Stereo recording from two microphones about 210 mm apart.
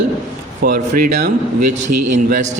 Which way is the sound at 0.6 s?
40° right (ahead or behind).